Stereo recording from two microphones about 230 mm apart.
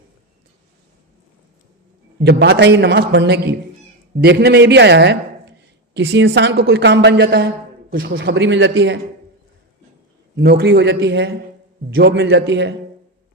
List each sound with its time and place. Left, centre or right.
2.2 s a woman's voice: right
10.3 s a woman's voice: right